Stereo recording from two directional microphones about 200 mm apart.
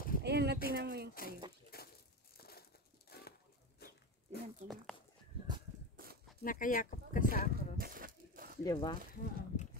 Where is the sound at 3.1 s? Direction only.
50° left (ahead or behind).